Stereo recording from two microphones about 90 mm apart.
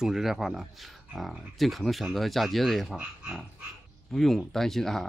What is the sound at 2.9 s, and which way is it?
Speech, 10° right (ahead or behind).